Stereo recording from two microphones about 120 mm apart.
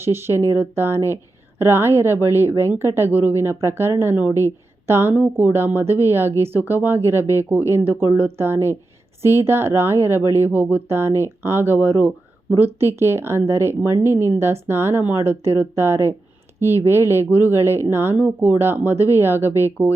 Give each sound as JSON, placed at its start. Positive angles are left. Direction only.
{"t": 0.0, "sound": "a woman's voice", "side_deg": -20}